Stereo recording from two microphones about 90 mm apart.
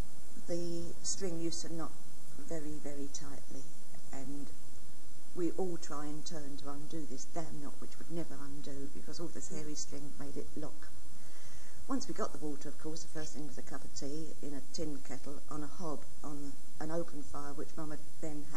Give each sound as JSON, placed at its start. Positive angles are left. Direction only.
{"t": 0.5, "sound": "speech", "side_deg": -45}
{"t": 5.3, "sound": "speech", "side_deg": -35}
{"t": 11.9, "sound": "speech", "side_deg": -35}